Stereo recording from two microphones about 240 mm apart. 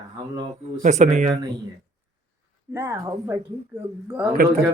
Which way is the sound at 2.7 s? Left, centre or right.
Centre.